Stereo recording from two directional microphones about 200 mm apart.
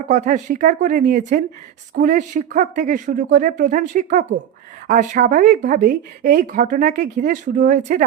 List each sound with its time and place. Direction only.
0.1 s speech: 35° right (ahead or behind)